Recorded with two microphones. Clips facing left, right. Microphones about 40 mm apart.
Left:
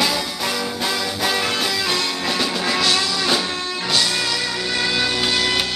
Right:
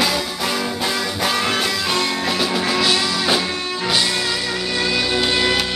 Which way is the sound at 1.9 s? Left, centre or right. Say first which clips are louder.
Right 2 dB; centre.